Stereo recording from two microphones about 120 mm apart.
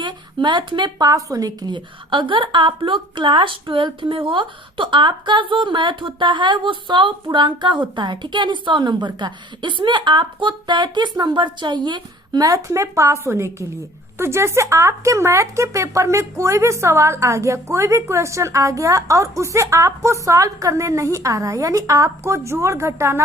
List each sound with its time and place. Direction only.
0.0 s a woman's voice: 40° right (ahead or behind); by 23.2 s 20° right (ahead or behind)